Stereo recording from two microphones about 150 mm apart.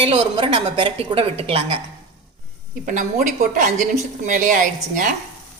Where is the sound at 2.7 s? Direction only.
60° right (ahead or behind).